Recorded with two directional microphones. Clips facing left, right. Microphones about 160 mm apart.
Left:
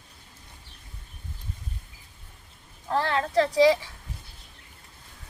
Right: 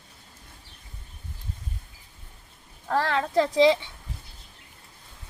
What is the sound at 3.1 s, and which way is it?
Speech, 30° right (ahead or behind).